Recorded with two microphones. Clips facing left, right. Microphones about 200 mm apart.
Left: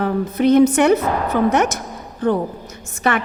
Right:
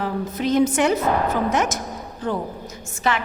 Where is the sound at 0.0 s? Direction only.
60° left (ahead or behind).